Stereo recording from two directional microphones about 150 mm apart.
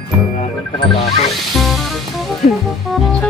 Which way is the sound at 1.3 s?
Centre (ahead or behind).